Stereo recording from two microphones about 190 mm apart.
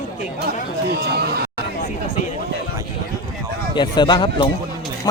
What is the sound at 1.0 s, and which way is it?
Speech, 55° right (ahead or behind).